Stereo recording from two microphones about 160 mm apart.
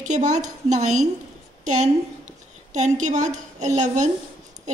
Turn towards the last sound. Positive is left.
turn(degrees=-50)  # may be behind; listen again after turning